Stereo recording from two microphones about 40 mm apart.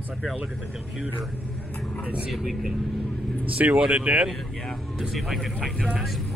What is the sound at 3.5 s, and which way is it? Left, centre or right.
Speech, right.